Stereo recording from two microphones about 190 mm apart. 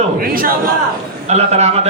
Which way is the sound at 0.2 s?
50° right (ahead or behind).